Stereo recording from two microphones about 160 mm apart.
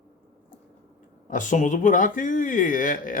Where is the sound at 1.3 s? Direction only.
50° left (ahead or behind).